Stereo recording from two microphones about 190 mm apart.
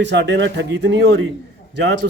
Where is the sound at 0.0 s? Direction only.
65° right (ahead or behind).